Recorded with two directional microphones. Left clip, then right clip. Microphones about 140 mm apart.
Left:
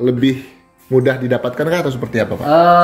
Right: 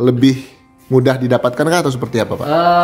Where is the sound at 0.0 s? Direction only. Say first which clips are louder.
Right 2 dB; 55° right (ahead or behind).